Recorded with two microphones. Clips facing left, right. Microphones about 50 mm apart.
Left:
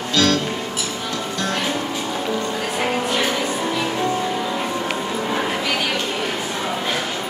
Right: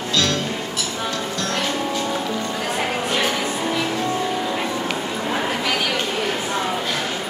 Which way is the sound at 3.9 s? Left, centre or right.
Centre.